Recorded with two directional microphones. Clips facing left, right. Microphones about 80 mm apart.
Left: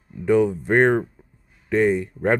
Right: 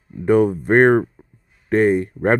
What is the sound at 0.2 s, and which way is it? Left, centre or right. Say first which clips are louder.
Speech: right 3 dB; right.